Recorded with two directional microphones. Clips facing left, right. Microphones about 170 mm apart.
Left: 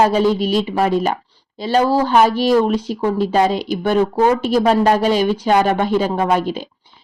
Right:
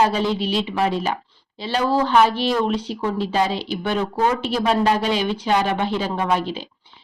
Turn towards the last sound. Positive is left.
turn(degrees=45)  # may be behind; listen again after turning